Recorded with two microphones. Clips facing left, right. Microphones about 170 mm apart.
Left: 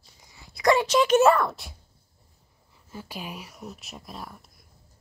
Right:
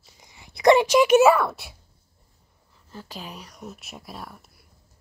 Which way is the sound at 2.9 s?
10° left (ahead or behind).